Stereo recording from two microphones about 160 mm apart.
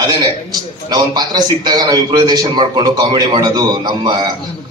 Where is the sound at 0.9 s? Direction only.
25° right (ahead or behind).